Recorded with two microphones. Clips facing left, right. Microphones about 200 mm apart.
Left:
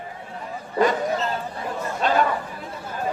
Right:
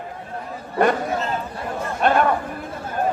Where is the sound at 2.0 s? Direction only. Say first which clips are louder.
Right 3 dB; 60° right (ahead or behind).